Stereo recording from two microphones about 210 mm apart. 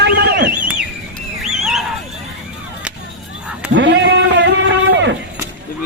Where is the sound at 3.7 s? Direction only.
55° right (ahead or behind).